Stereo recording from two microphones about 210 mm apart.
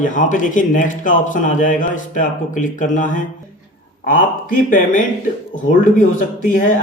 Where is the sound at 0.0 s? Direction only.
40° left (ahead or behind).